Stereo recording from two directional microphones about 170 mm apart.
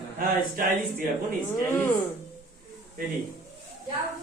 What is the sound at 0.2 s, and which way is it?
Speech, 50° right (ahead or behind).